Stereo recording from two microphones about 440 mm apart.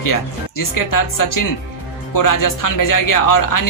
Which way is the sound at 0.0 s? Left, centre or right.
Left.